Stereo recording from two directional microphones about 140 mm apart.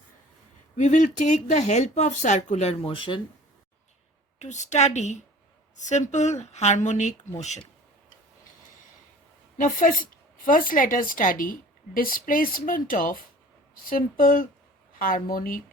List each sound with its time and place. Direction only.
0.8 s speech: 60° left (ahead or behind); by 3.2 s 40° left (ahead or behind)
4.4 s speech: 55° left (ahead or behind)
9.6 s a woman's voice: 75° left (ahead or behind)
11.9 s speech: 90° left
13.8 s speech: 90° left